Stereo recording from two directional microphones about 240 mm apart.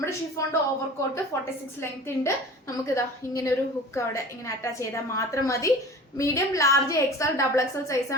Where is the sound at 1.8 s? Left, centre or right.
Centre.